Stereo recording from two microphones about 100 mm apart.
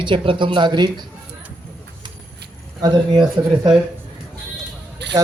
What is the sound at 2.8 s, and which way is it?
Speech, 50° right (ahead or behind).